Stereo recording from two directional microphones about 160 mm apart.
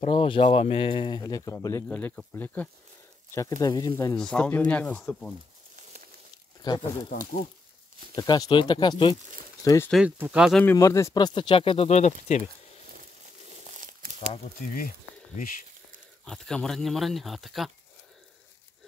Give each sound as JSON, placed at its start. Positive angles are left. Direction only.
{"t": 0.0, "sound": "speech", "side_deg": 35}
{"t": 3.3, "sound": "speech", "side_deg": 25}
{"t": 4.2, "sound": "speech", "side_deg": 5}
{"t": 6.6, "sound": "speech", "side_deg": 25}
{"t": 8.2, "sound": "speech", "side_deg": 25}
{"t": 9.9, "sound": "speech", "side_deg": 5}
{"t": 10.6, "sound": "speech", "side_deg": 15}
{"t": 13.7, "sound": "crumpling", "side_deg": -55}
{"t": 14.8, "sound": "speech", "side_deg": 65}
{"t": 16.3, "sound": "speech", "side_deg": 5}